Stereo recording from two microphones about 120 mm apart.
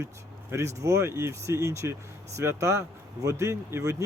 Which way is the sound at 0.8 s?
25° right (ahead or behind).